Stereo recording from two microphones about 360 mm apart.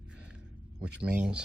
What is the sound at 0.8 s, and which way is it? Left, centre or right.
Speech, centre.